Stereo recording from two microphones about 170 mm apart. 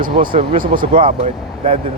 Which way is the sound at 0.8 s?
30° right (ahead or behind).